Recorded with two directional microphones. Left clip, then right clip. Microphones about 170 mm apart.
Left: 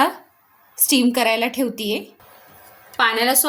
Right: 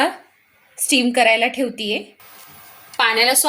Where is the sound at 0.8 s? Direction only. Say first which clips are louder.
Right 2 dB; 50° left (ahead or behind).